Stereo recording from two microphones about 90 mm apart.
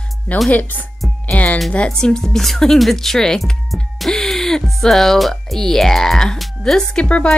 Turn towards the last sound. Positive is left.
turn(degrees=10)  # may be behind; listen again after turning